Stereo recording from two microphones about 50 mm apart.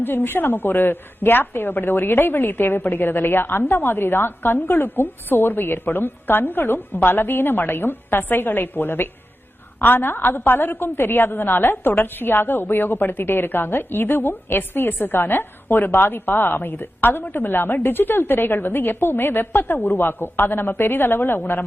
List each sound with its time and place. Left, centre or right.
0.0 s a woman's voice: left